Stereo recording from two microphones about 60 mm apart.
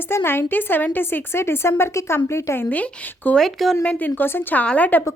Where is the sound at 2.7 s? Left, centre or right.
Left.